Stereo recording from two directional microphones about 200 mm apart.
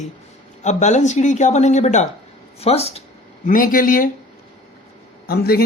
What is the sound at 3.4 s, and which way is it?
Speech, 45° left (ahead or behind).